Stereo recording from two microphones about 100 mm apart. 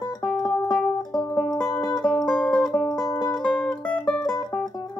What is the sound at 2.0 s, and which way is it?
Music, 5° left (ahead or behind).